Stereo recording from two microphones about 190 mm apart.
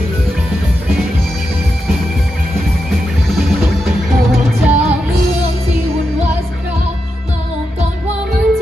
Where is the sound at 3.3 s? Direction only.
Centre (ahead or behind).